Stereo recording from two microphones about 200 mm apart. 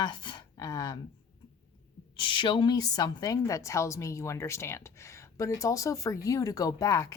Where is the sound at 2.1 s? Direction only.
25° left (ahead or behind).